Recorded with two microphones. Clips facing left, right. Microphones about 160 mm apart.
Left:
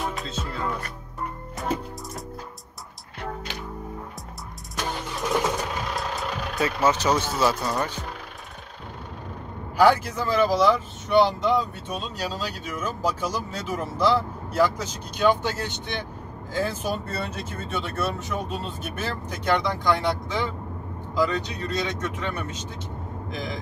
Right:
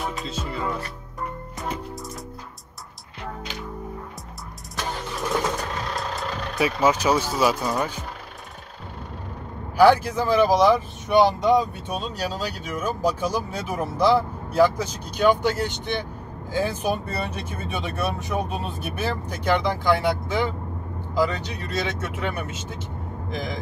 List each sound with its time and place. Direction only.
0.0 s music: centre (ahead or behind)
5.4 s vehicle: 5° left (ahead or behind)
6.6 s speech: 10° right (ahead or behind)
9.8 s speech: 10° right (ahead or behind)